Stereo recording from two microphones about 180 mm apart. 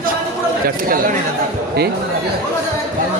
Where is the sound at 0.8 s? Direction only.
50° right (ahead or behind).